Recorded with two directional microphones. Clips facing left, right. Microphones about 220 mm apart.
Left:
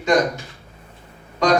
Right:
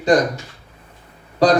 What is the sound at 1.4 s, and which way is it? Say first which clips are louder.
Speech: right 3 dB; 35° right (ahead or behind).